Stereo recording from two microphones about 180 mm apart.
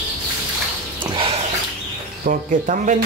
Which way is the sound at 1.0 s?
30° right (ahead or behind).